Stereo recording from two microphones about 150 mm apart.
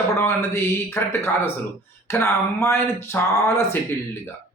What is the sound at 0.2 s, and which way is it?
A man's voice, 15° left (ahead or behind).